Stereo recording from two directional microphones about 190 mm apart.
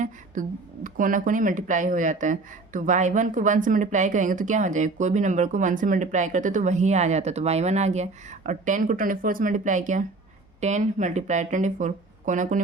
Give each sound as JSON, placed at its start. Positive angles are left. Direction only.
{"t": 0.4, "sound": "a woman's voice", "side_deg": -40}